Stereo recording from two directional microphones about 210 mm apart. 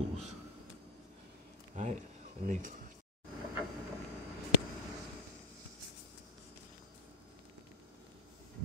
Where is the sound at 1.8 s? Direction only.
35° right (ahead or behind).